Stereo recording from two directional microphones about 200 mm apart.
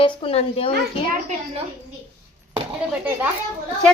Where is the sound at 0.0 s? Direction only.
30° left (ahead or behind).